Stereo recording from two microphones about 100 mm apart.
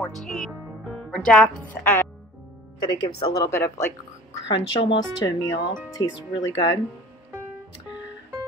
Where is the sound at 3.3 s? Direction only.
35° left (ahead or behind).